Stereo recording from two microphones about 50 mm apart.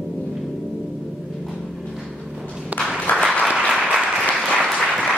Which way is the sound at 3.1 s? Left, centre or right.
Left.